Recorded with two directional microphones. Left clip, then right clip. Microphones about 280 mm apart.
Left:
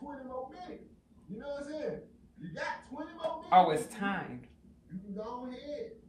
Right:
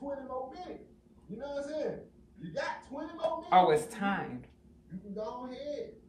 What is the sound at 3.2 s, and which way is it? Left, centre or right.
Speech, centre.